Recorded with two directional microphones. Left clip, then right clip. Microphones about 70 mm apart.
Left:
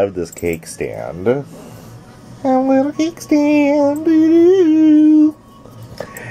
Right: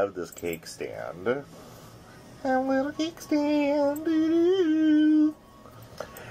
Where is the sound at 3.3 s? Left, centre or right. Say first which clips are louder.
Left 11 dB; right.